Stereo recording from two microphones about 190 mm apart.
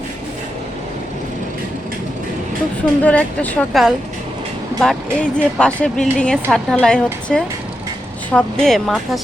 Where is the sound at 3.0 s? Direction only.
5° left (ahead or behind).